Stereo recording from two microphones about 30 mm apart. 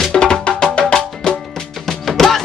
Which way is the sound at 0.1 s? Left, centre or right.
Left.